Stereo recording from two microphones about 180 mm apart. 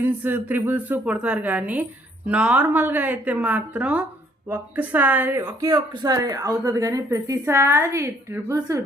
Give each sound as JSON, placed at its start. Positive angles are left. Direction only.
{"t": 0.0, "sound": "speech", "side_deg": -10}